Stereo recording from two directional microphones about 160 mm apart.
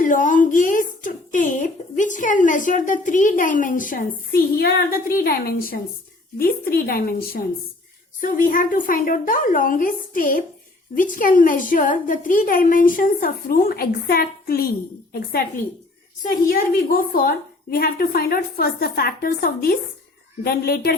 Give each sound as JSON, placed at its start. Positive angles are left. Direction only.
{"t": 0.0, "sound": "a woman's voice", "side_deg": 55}
{"t": 16.5, "sound": "a woman's voice", "side_deg": 65}